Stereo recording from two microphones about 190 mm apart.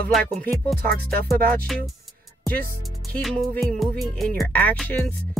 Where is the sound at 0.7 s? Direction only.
55° right (ahead or behind).